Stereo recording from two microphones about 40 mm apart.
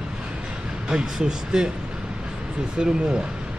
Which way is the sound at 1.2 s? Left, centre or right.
Centre.